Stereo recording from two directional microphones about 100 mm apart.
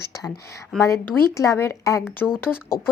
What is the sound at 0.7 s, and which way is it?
Speech, 5° left (ahead or behind).